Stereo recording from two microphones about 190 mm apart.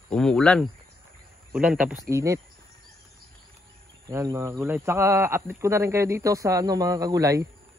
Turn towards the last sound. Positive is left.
turn(degrees=-20)  # may be behind; listen again after turning